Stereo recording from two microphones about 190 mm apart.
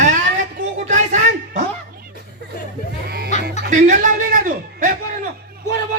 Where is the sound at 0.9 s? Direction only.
40° right (ahead or behind).